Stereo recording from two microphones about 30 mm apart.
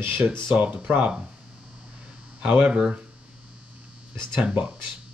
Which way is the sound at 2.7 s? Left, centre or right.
Right.